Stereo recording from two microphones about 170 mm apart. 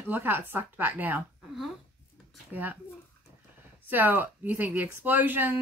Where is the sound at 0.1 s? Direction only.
10° right (ahead or behind).